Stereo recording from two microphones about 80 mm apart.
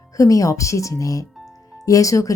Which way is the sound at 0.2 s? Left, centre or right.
Left.